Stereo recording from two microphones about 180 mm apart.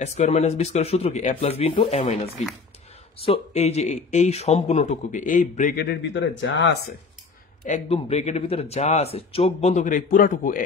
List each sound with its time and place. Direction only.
0.0 s speech: 40° left (ahead or behind); by 6.8 s 75° left (ahead or behind)
7.6 s speech: 40° left (ahead or behind)